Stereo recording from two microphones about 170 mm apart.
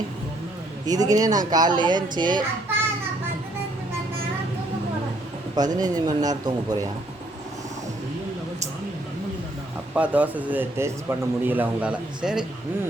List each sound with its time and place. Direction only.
0.9 s speech: 20° right (ahead or behind)
5.5 s speech: 25° right (ahead or behind)
9.9 s speech: 10° right (ahead or behind)